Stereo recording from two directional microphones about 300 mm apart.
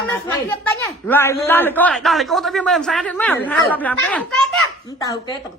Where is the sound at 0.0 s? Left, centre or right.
Centre.